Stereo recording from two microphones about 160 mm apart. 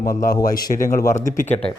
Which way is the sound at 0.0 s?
60° left (ahead or behind).